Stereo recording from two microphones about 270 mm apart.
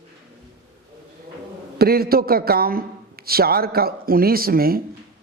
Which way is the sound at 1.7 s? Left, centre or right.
Right.